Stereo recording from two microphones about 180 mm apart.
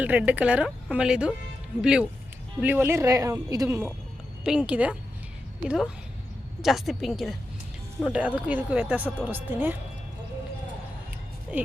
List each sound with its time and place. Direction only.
0.0 s a woman's voice: 10° right (ahead or behind)
4.4 s a woman's voice: 5° right (ahead or behind)
11.5 s speech: 10° right (ahead or behind)